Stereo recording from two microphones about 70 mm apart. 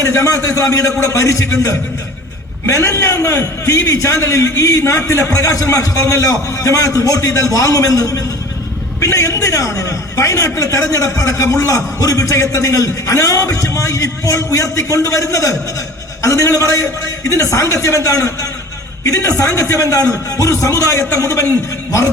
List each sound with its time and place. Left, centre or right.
0.0 s a man's voice: left